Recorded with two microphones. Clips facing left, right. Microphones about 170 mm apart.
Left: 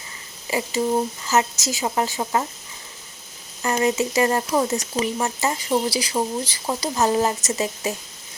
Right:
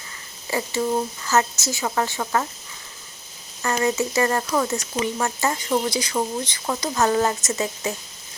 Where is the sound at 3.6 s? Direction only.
20° left (ahead or behind).